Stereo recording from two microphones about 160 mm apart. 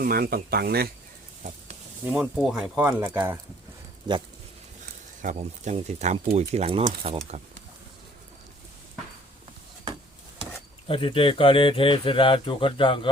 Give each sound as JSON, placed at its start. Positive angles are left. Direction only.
{"t": 0.0, "sound": "speech", "side_deg": -65}
{"t": 2.0, "sound": "speech", "side_deg": -5}
{"t": 5.2, "sound": "speech", "side_deg": -50}
{"t": 10.8, "sound": "speech", "side_deg": 35}